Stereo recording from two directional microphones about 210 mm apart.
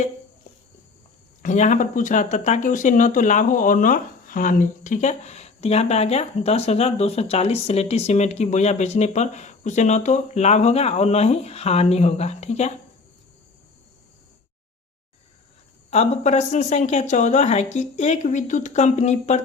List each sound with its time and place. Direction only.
1.4 s speech: 35° left (ahead or behind)
15.9 s speech: 30° left (ahead or behind)